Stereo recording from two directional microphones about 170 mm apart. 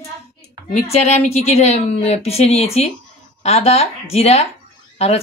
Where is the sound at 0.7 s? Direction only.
40° left (ahead or behind).